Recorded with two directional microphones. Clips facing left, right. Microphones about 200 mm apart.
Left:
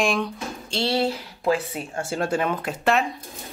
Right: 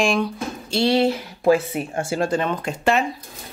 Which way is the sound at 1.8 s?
10° right (ahead or behind).